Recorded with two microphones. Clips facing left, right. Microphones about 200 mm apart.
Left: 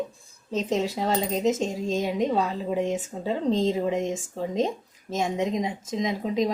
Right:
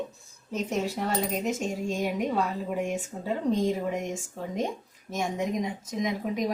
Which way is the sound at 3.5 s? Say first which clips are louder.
Left 4 dB; 25° left (ahead or behind).